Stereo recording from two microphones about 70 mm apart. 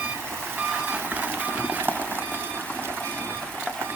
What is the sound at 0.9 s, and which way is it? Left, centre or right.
Vehicle, right.